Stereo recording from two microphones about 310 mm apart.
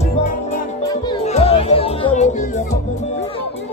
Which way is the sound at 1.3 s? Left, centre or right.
Centre.